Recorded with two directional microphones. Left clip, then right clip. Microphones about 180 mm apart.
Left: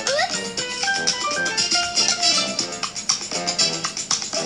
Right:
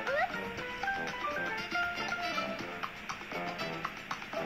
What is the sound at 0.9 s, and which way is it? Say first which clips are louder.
Music: left 13 dB; 25° left (ahead or behind).